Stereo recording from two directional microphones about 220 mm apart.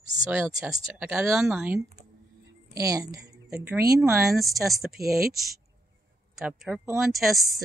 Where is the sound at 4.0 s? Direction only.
5° right (ahead or behind).